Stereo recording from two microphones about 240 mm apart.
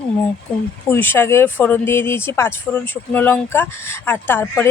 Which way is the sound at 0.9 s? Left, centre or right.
Centre.